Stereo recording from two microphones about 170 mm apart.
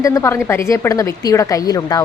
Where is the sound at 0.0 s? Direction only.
20° left (ahead or behind).